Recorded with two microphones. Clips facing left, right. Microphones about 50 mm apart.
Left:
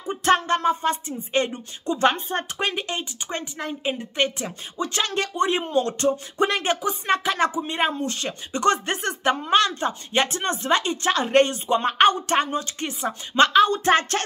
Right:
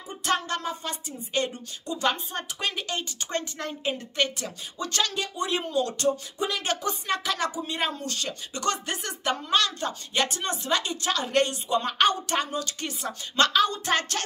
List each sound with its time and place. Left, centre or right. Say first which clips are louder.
0.1 s speech: left 8 dB; left
2.6 s a woman's voice: left 4 dB; left
5.1 s speech: left 7 dB; left
5.5 s speech: left 4 dB; left
6.3 s speech: left 7 dB; left
7.1 s speech: left 7 dB; left